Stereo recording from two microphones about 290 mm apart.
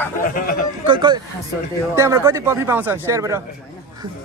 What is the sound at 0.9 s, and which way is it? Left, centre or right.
Speech, centre.